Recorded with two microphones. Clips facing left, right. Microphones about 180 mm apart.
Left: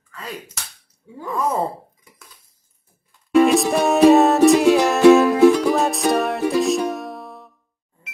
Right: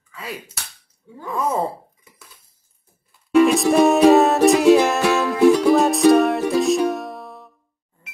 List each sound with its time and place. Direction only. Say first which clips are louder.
0.1 s speech: even; 10° right (ahead or behind)
1.1 s a sound: even; centre (ahead or behind)
3.1 s music: even; centre (ahead or behind)